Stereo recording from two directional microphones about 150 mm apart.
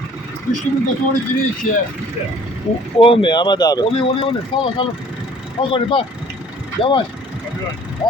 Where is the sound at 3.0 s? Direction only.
35° left (ahead or behind).